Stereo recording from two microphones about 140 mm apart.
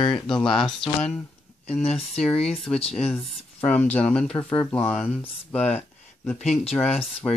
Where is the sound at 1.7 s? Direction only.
45° left (ahead or behind).